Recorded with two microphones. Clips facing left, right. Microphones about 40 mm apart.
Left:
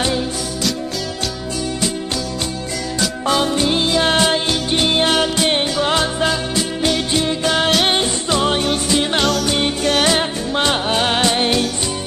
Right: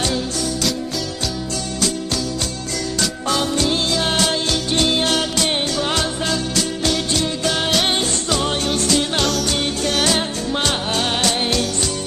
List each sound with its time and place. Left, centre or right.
0.0 s music: centre
3.3 s music: left